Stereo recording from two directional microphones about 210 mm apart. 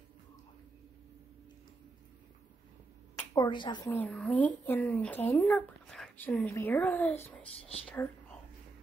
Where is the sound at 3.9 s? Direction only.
5° left (ahead or behind).